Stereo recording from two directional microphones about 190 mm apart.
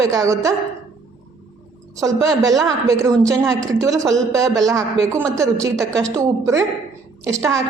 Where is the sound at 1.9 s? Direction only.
20° right (ahead or behind).